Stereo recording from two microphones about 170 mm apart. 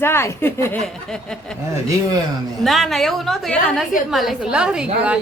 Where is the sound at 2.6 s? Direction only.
Centre (ahead or behind).